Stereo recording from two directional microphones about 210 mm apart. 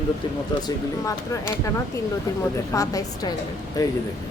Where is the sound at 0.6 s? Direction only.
15° left (ahead or behind).